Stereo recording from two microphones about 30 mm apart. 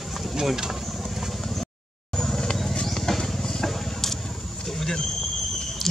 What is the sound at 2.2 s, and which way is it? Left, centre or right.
Vehicle, left.